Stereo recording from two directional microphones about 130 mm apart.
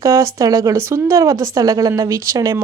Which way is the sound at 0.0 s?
25° right (ahead or behind).